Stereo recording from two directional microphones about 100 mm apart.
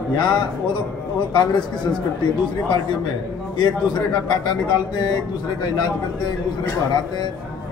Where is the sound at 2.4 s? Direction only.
50° left (ahead or behind).